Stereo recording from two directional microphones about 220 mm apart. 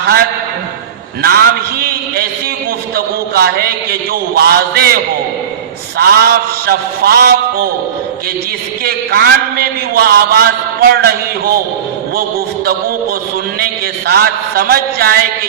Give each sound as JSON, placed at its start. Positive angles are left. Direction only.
{"t": 1.2, "sound": "a man's voice", "side_deg": -45}
{"t": 6.0, "sound": "a man's voice", "side_deg": -45}
{"t": 8.8, "sound": "a man's voice", "side_deg": -45}
{"t": 14.1, "sound": "a man's voice", "side_deg": -45}